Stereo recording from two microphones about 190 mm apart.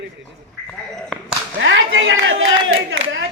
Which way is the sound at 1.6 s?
75° right (ahead or behind).